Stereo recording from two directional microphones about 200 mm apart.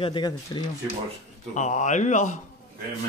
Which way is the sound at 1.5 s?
35° left (ahead or behind).